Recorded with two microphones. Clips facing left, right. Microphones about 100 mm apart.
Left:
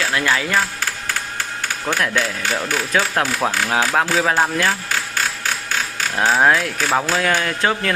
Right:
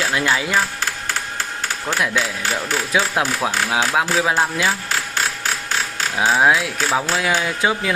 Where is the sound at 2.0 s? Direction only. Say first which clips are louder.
Right 1 dB; 5° right (ahead or behind).